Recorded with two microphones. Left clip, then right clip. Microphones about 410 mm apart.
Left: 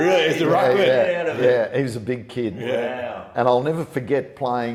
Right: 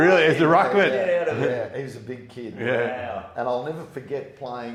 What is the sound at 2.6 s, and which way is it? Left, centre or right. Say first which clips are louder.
Speech: right 2 dB; right.